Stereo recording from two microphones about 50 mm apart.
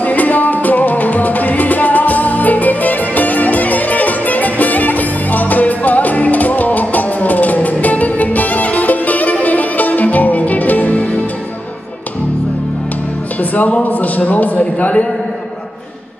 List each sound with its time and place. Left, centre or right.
0.0 s music: left
13.4 s music: left
13.8 s speech: left